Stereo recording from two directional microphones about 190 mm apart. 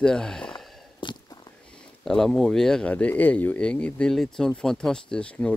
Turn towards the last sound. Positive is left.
turn(degrees=5)  # may be behind; listen again after turning